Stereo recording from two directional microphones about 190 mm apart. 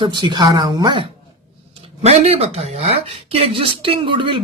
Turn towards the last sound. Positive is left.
turn(degrees=-25)  # may be behind; listen again after turning